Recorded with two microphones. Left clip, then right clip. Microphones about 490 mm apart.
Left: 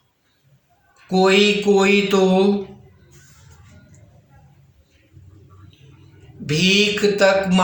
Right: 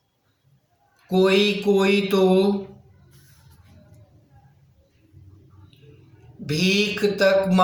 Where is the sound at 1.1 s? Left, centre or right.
Right.